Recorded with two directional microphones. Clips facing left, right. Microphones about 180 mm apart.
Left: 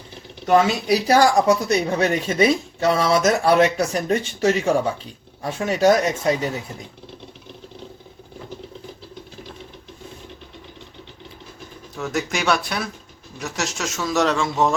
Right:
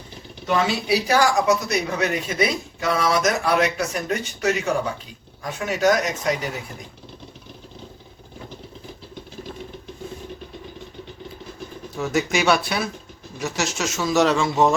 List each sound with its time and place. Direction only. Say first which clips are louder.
0.4 s speech: left 5 dB; 40° left (ahead or behind)
11.9 s speech: right 3 dB; centre (ahead or behind)